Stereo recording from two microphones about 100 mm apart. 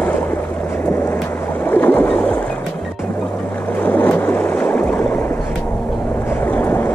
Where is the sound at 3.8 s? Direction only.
15° left (ahead or behind).